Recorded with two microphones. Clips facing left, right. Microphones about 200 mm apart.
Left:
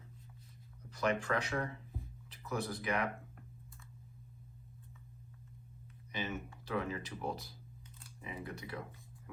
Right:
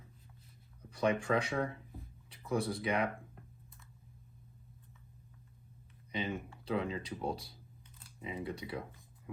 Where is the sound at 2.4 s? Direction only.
30° right (ahead or behind).